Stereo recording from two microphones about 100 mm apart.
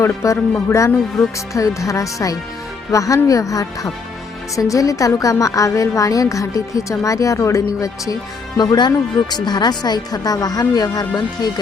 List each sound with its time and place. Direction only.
0.0 s a woman's voice: 30° left (ahead or behind)